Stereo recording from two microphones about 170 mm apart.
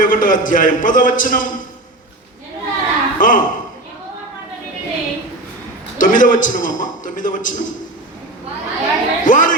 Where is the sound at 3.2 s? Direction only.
50° left (ahead or behind).